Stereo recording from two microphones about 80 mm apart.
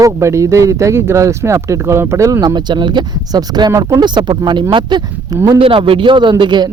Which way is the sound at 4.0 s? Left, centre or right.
Right.